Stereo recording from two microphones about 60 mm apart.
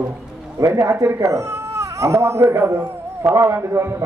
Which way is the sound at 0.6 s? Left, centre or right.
Right.